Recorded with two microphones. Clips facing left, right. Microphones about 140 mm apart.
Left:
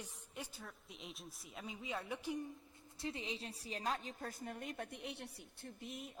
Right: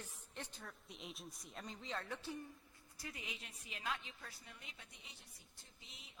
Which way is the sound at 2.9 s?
25° left (ahead or behind).